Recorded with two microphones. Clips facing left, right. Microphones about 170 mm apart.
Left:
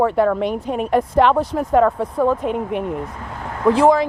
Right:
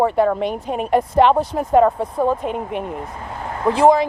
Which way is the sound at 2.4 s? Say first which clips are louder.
Left 2 dB; centre (ahead or behind).